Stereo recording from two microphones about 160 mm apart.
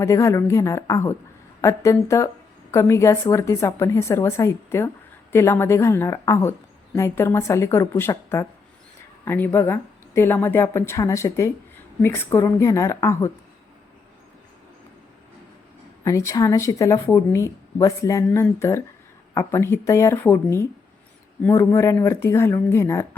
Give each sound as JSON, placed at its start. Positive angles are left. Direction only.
{"t": 0.0, "sound": "a woman's voice", "side_deg": 20}
{"t": 16.0, "sound": "a woman's voice", "side_deg": 20}